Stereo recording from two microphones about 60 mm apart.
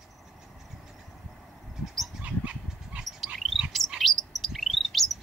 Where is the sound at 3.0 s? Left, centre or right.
Centre.